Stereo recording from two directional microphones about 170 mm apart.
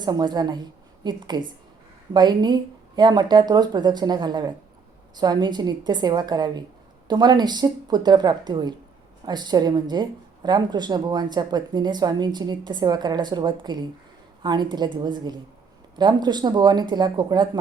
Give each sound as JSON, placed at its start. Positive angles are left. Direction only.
{"t": 0.0, "sound": "a woman's voice", "side_deg": -25}